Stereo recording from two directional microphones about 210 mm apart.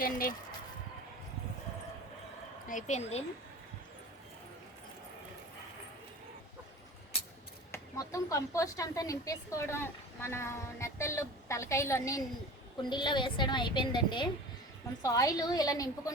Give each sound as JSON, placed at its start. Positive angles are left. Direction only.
{"t": 0.0, "sound": "speech", "side_deg": 40}
{"t": 2.6, "sound": "speech", "side_deg": 35}
{"t": 7.7, "sound": "a woman's voice", "side_deg": 15}